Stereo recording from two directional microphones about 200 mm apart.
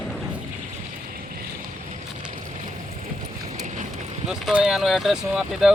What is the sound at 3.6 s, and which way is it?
Boat, 35° right (ahead or behind).